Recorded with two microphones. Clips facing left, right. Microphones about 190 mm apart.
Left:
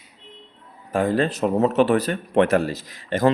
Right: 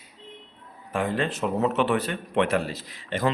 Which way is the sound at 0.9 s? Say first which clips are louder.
Left 6 dB; 40° left (ahead or behind).